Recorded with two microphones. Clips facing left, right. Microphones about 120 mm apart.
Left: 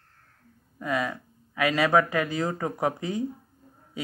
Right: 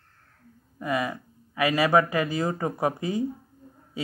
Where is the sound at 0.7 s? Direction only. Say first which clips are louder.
Right 1 dB; 10° right (ahead or behind).